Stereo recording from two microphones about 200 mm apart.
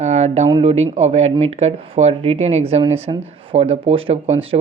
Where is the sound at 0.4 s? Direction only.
25° right (ahead or behind).